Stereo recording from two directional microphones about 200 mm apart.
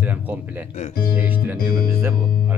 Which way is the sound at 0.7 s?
40° left (ahead or behind).